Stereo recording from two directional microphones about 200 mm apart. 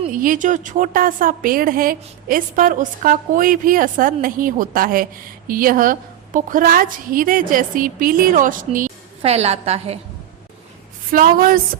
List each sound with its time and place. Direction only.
0.1 s a woman's voice: 45° right (ahead or behind)
11.1 s a woman's voice: 45° right (ahead or behind)